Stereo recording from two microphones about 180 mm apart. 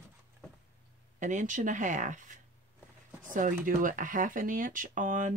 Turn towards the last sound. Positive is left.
turn(degrees=-45)  # may be behind; listen again after turning